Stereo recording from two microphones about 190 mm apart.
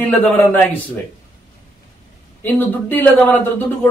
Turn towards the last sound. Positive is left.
turn(degrees=10)  # may be behind; listen again after turning